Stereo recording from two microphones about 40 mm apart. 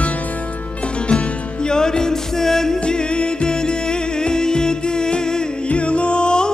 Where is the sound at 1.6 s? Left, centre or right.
Centre.